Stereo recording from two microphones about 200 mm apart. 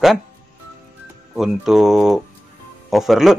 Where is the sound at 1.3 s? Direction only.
Centre (ahead or behind).